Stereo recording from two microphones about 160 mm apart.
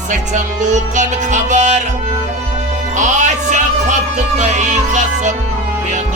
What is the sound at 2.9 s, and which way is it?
Music, 50° right (ahead or behind).